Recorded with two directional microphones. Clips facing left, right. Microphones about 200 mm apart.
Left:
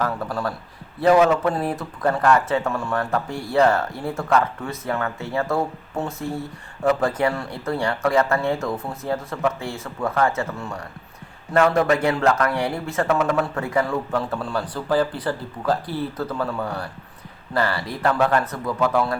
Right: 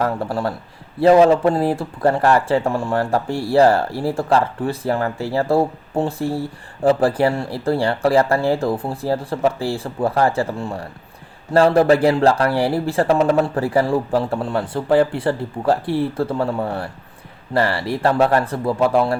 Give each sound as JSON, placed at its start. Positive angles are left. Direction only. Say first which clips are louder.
{"t": 0.0, "sound": "speech", "louder": "right 4 dB", "side_deg": -30}